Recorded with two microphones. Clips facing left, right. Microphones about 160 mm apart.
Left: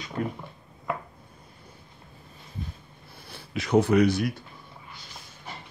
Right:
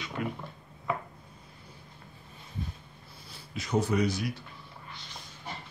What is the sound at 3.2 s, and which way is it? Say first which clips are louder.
Speech: left 7 dB; 65° left (ahead or behind).